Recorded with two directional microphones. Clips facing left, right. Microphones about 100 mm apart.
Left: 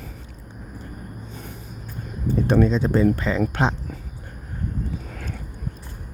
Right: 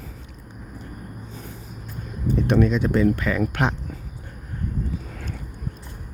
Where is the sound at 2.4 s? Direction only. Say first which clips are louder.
Left 1 dB; 30° left (ahead or behind).